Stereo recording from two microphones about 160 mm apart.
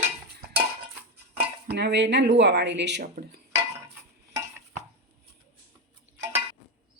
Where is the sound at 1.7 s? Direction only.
90° right.